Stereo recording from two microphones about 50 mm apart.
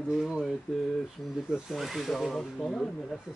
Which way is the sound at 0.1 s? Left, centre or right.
Centre.